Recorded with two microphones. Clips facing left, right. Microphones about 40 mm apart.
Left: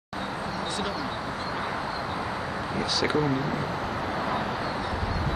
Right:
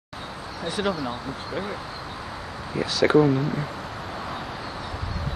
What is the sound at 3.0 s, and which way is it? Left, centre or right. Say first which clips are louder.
Speech: right 9 dB; centre.